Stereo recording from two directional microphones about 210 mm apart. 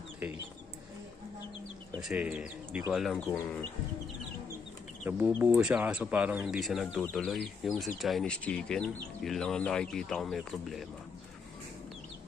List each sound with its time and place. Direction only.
2.0 s speech: 5° right (ahead or behind)
5.0 s speech: 5° right (ahead or behind)